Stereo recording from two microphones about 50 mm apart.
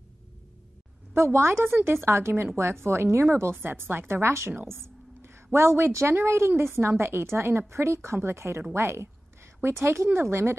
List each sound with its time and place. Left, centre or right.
1.1 s speech: right
1.7 s speech: right
2.0 s speech: right